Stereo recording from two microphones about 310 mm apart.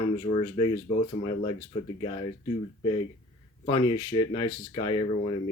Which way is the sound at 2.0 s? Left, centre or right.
Centre.